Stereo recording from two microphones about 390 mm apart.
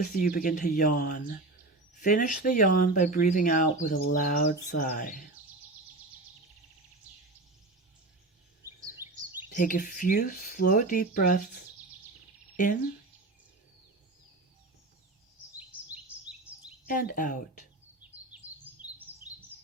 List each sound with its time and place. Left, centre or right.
0.0 s speech: centre
8.6 s a sound: centre
9.5 s speech: centre
12.5 s speech: centre
16.8 s speech: left
18.3 s chirp: centre